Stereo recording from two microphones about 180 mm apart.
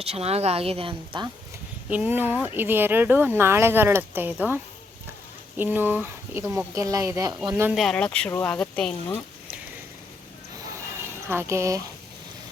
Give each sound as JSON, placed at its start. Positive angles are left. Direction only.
{"t": 0.0, "sound": "speech", "side_deg": -35}
{"t": 1.9, "sound": "speech", "side_deg": -10}
{"t": 7.8, "sound": "speech", "side_deg": 5}
{"t": 11.3, "sound": "speech", "side_deg": -15}